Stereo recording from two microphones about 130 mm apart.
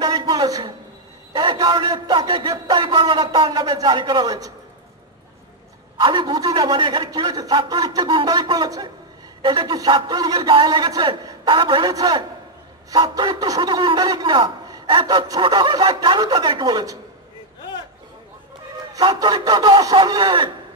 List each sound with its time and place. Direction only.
0.0 s a sound: 30° right (ahead or behind)
1.3 s a man's voice: 35° right (ahead or behind)
5.9 s a man's voice: 35° right (ahead or behind)
18.9 s a man's voice: 30° right (ahead or behind)